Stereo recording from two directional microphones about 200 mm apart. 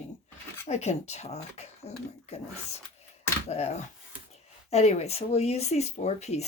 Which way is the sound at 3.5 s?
30° left (ahead or behind).